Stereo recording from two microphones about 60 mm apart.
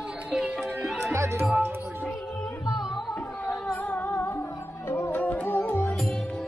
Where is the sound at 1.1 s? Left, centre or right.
Right.